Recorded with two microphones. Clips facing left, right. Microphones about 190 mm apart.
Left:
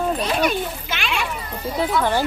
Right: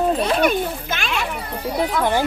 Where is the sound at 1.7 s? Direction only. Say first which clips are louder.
Even; 15° right (ahead or behind).